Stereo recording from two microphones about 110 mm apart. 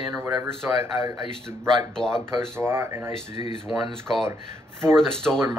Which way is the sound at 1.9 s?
5° left (ahead or behind).